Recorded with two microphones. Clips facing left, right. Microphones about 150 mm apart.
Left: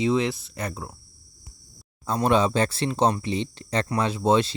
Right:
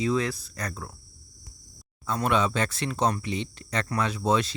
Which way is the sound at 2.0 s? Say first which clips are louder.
Left 4 dB; 30° left (ahead or behind).